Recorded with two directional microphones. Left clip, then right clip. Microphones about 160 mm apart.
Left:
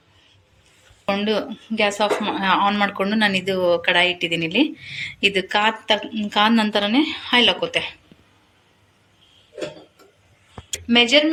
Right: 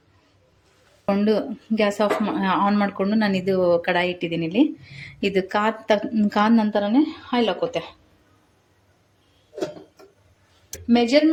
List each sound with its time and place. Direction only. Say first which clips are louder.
1.0 s speech: even; 35° right (ahead or behind)
10.8 s speech: left 3 dB; 45° right (ahead or behind)